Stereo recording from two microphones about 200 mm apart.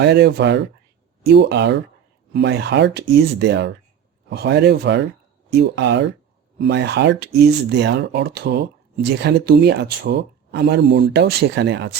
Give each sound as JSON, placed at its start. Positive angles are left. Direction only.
{"t": 0.0, "sound": "speech", "side_deg": -55}